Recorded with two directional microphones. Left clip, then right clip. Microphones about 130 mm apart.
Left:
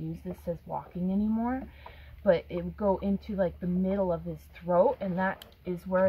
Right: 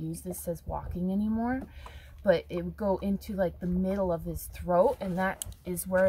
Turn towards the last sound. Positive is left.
turn(degrees=-30)  # may be behind; listen again after turning